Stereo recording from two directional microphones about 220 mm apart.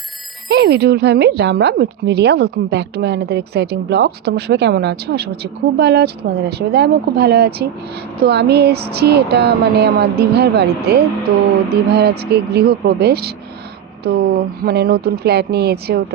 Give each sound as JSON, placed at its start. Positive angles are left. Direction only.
{"t": 0.4, "sound": "speech", "side_deg": -50}